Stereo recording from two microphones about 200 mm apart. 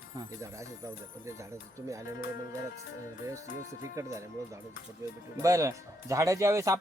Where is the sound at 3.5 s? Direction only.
40° left (ahead or behind).